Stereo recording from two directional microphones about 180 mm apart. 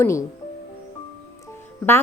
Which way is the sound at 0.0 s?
15° left (ahead or behind).